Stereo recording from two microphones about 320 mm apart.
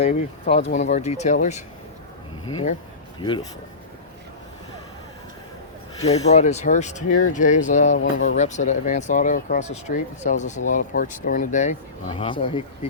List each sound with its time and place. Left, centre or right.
0.0 s speech: left
3.2 s speech: centre
6.0 s speech: centre